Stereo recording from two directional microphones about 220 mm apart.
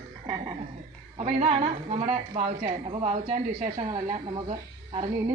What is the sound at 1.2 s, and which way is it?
A woman's voice, 25° right (ahead or behind).